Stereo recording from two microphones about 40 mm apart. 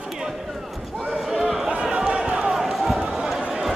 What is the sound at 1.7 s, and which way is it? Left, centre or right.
Basketball bounce, right.